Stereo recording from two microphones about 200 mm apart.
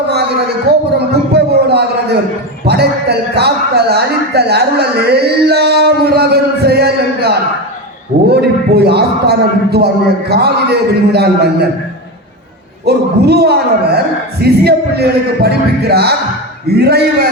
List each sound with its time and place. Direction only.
1.3 s a sound: 55° right (ahead or behind)
2.6 s a man's voice: 55° right (ahead or behind)
12.8 s a man's voice: 55° right (ahead or behind)